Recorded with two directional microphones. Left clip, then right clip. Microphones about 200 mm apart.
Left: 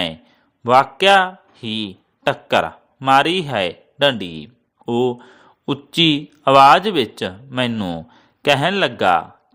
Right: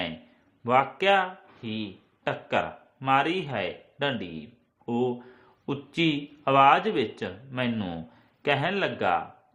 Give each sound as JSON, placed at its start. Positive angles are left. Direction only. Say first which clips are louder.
{"t": 0.6, "sound": "speech", "louder": "left 10 dB", "side_deg": 40}